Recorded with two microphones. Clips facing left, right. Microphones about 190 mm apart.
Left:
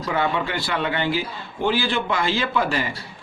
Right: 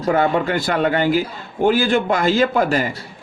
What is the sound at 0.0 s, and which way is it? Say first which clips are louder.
A man's voice: right 6 dB; 45° right (ahead or behind).